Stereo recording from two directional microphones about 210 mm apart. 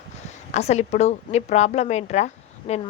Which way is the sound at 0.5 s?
30° left (ahead or behind).